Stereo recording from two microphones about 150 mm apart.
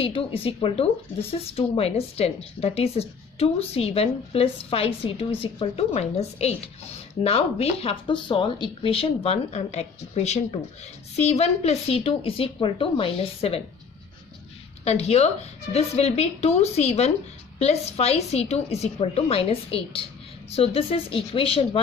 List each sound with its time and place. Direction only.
0.0 s a woman's voice: 35° left (ahead or behind)
14.9 s a woman's voice: 45° left (ahead or behind)